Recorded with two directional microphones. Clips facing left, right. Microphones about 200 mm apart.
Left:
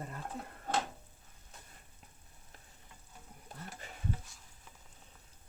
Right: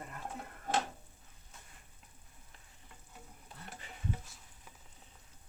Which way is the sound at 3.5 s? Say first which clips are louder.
Left 5 dB; 45° left (ahead or behind).